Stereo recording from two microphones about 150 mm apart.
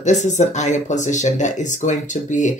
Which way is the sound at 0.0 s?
55° left (ahead or behind).